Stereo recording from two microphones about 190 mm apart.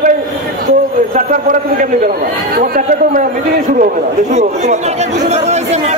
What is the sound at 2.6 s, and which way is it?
Speech, 45° right (ahead or behind).